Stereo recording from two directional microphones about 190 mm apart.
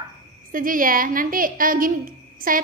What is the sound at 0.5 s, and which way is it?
A woman's voice, 45° right (ahead or behind).